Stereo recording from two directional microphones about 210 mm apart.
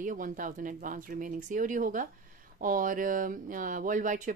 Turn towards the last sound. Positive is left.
turn(degrees=-40)  # may be behind; listen again after turning